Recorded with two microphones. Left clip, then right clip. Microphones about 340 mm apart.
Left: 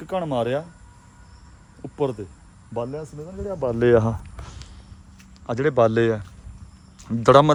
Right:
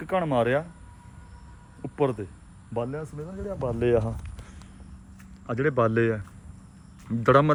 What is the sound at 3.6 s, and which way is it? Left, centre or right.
Speech, left.